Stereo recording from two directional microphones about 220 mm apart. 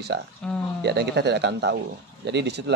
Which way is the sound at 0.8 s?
50° right (ahead or behind).